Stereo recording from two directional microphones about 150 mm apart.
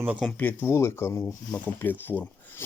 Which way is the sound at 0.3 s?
10° left (ahead or behind).